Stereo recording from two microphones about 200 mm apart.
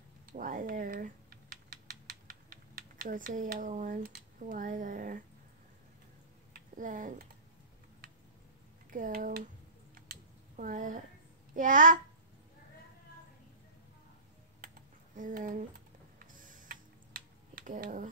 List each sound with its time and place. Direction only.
0.3 s typing: 45° right (ahead or behind)
6.5 s speech: 40° right (ahead or behind)
8.9 s speech: 40° right (ahead or behind)
9.9 s computer keyboard: 45° right (ahead or behind)
11.5 s speech: 40° right (ahead or behind)
15.1 s speech: 40° right (ahead or behind)
16.2 s tick-tock: 40° right (ahead or behind)